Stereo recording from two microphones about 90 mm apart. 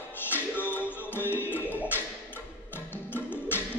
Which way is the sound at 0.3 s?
20° left (ahead or behind).